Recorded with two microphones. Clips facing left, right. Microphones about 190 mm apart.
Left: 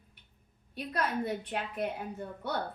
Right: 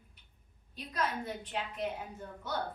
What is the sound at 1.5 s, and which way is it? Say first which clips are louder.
Speech: left 2 dB; 55° left (ahead or behind).